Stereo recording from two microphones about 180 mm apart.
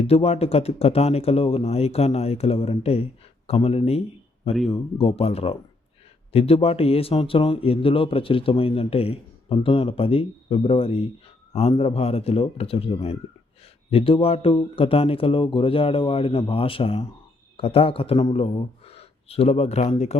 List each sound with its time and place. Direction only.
0.0 s speech: 35° left (ahead or behind)